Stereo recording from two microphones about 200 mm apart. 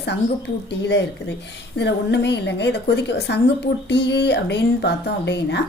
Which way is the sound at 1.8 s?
60° left (ahead or behind).